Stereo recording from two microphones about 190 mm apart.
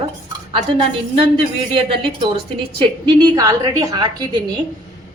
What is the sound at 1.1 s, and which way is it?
A woman's voice, 30° right (ahead or behind).